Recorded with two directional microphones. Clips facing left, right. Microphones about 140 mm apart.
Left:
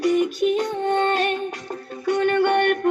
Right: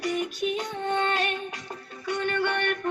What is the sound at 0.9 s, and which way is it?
Music, 40° left (ahead or behind).